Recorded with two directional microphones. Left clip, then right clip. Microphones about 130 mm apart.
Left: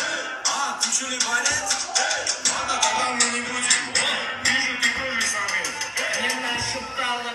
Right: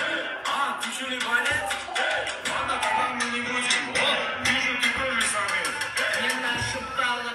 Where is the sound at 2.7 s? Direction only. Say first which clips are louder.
Left 2 dB; 45° left (ahead or behind).